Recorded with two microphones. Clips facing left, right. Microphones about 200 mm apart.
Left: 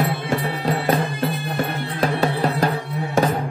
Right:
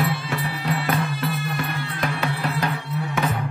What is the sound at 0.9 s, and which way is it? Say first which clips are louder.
Bagpipes: left 3 dB; 50° left (ahead or behind).